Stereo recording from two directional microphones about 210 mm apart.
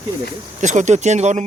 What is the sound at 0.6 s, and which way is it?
Speech, 35° right (ahead or behind).